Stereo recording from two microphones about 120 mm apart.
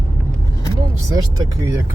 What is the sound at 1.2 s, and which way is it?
Speech, 25° right (ahead or behind).